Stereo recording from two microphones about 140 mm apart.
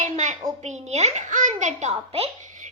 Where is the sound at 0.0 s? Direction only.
60° right (ahead or behind).